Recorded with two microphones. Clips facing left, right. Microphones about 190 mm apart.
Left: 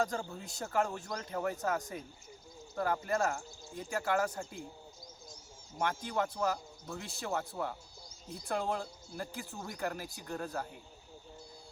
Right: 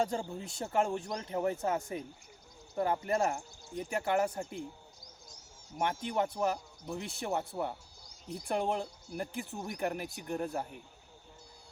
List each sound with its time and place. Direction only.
0.0 s speech: 25° right (ahead or behind)
5.7 s speech: 20° right (ahead or behind)